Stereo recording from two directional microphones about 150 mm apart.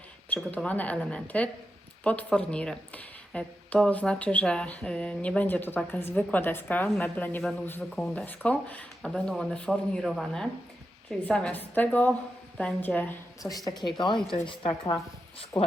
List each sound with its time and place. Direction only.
0.3 s speech: 10° left (ahead or behind)
13.9 s speech: 30° left (ahead or behind)
15.5 s speech: 10° left (ahead or behind)